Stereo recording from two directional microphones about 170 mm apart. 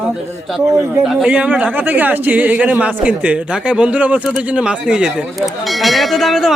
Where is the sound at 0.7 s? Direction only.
15° right (ahead or behind).